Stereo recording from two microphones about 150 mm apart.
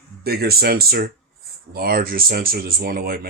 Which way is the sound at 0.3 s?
90° right.